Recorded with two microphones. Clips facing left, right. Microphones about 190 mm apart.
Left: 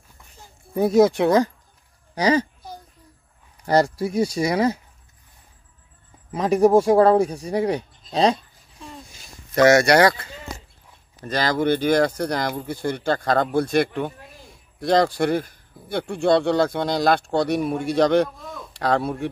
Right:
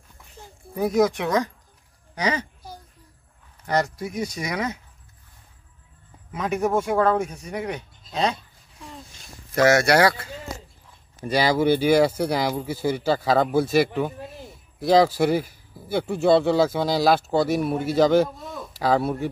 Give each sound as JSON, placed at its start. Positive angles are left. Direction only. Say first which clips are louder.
{"t": 0.7, "sound": "a child's voice", "louder": "left 4 dB", "side_deg": 30}
{"t": 3.6, "sound": "speech", "louder": "left 5 dB", "side_deg": 35}
{"t": 6.3, "sound": "speech", "louder": "left 7 dB", "side_deg": 35}
{"t": 9.5, "sound": "a man's voice", "louder": "left 3 dB", "side_deg": -5}